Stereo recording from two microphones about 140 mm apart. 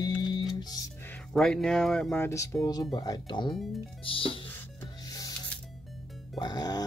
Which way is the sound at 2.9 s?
30° left (ahead or behind).